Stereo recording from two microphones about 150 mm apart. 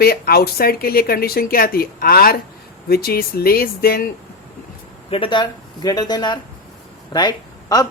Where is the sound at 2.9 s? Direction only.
90° left.